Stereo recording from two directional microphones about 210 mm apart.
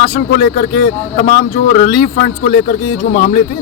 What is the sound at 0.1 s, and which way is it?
Speech, 50° left (ahead or behind).